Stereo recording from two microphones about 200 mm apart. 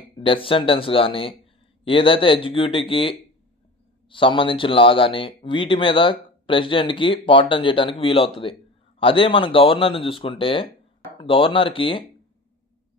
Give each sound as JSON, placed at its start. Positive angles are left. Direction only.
{"t": 0.2, "sound": "speech", "side_deg": 25}